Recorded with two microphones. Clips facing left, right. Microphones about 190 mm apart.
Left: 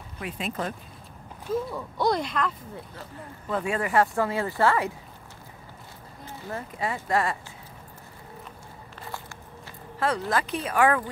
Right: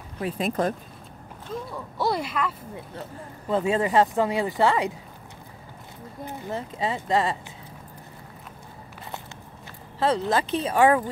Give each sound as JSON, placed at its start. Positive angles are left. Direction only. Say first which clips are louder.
{"t": 0.2, "sound": "speech", "louder": "right 6 dB", "side_deg": -35}
{"t": 1.5, "sound": "speech", "louder": "left 5 dB", "side_deg": 0}
{"t": 3.4, "sound": "speech", "louder": "right 5 dB", "side_deg": -25}
{"t": 6.2, "sound": "speech", "louder": "right 4 dB", "side_deg": -20}
{"t": 9.9, "sound": "speech", "louder": "right 3 dB", "side_deg": -25}